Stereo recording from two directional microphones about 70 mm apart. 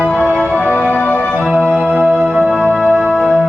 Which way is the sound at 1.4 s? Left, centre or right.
Centre.